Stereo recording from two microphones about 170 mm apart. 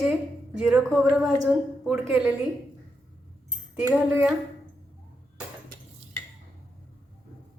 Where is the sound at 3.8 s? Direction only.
10° right (ahead or behind).